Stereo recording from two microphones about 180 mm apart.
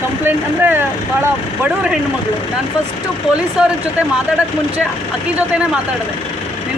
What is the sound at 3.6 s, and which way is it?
Speech, 5° right (ahead or behind).